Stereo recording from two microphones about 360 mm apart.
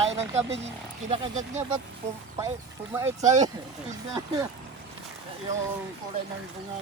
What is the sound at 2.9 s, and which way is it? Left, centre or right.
Speech, centre.